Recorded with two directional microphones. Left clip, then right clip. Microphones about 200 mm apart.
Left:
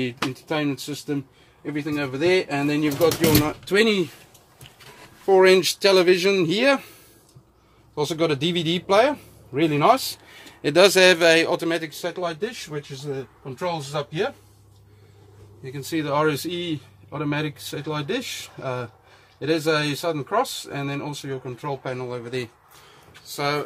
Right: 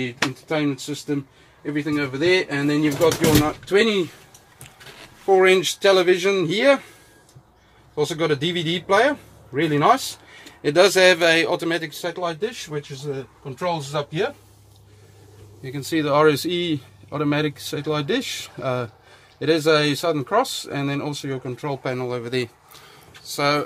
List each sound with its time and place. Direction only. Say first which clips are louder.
0.5 s speech: right 2 dB; 45° left (ahead or behind)
5.2 s speech: even; 50° left (ahead or behind)
7.9 s speech: right 1 dB; 40° left (ahead or behind)
11.6 s speech: right 1 dB; 25° left (ahead or behind)
12.7 s speech: right 2 dB; 15° left (ahead or behind)
13.6 s speech: right 2 dB; centre (ahead or behind)
15.7 s speech: right 4 dB; 55° right (ahead or behind)